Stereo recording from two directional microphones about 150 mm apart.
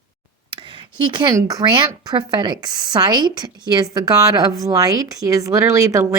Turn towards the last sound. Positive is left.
turn(degrees=-20)  # may be behind; listen again after turning